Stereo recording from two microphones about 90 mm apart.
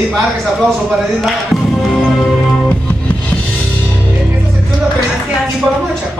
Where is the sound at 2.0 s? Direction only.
10° left (ahead or behind).